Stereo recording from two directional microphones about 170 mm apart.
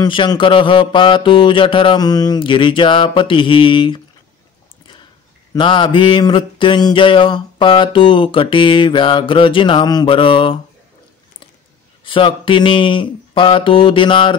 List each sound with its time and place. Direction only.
0.0 s mantra: 25° left (ahead or behind)
5.5 s mantra: 30° left (ahead or behind)
12.0 s mantra: 30° left (ahead or behind)